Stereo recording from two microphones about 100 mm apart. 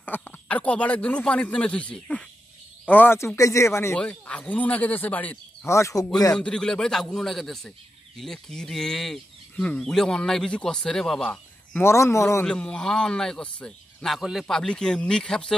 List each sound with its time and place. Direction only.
0.0 s speech: 15° left (ahead or behind)
3.3 s speech: 30° left (ahead or behind)
3.9 s speech: 10° left (ahead or behind)
5.7 s speech: 30° left (ahead or behind)
6.3 s speech: 10° left (ahead or behind)
11.8 s speech: 30° left (ahead or behind)
12.4 s speech: 10° left (ahead or behind)